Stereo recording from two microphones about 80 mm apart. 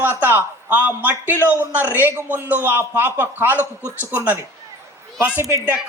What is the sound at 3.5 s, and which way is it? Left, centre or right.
Speech, left.